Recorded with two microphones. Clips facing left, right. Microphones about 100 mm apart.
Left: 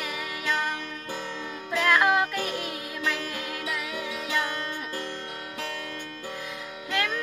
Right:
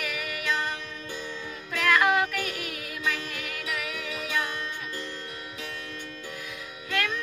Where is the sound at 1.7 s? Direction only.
25° left (ahead or behind).